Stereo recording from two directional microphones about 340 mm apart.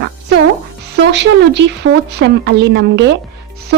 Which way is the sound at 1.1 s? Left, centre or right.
Right.